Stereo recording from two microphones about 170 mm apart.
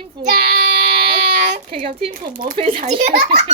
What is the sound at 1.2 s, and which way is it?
Child singing, 45° right (ahead or behind).